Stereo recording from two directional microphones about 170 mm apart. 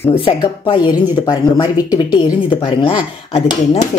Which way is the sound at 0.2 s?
25° left (ahead or behind).